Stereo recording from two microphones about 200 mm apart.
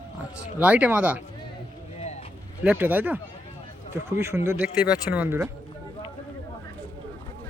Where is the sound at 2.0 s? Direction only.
35° left (ahead or behind).